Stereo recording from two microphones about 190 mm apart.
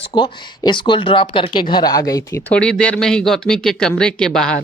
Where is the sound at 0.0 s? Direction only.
25° left (ahead or behind).